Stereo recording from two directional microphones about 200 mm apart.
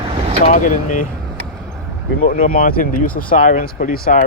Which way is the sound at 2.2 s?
45° left (ahead or behind).